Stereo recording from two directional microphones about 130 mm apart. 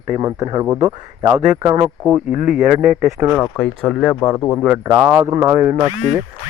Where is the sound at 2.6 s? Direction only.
5° right (ahead or behind).